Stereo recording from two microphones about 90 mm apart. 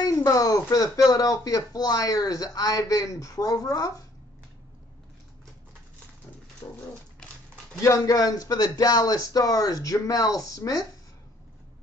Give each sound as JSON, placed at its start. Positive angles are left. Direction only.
{"t": 0.0, "sound": "speech", "side_deg": 40}
{"t": 6.6, "sound": "dog", "side_deg": 20}
{"t": 7.8, "sound": "speech", "side_deg": 40}